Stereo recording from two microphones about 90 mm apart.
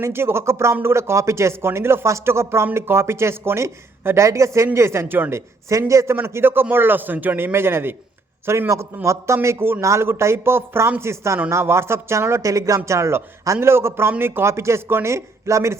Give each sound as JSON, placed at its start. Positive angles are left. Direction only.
{"t": 0.0, "sound": "speech", "side_deg": -25}
{"t": 5.6, "sound": "speech", "side_deg": -35}